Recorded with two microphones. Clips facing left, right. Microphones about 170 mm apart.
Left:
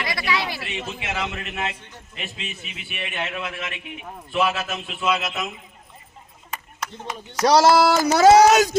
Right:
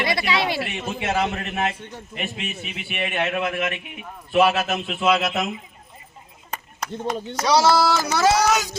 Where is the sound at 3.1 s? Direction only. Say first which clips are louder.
Right 6 dB; 50° right (ahead or behind).